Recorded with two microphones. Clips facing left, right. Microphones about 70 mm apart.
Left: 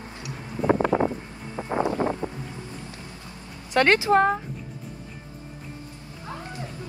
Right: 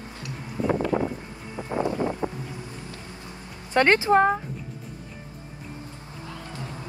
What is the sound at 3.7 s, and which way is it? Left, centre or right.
Speech, right.